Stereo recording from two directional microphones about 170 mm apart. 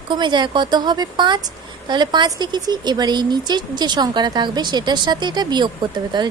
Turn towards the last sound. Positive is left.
turn(degrees=-25)  # may be behind; listen again after turning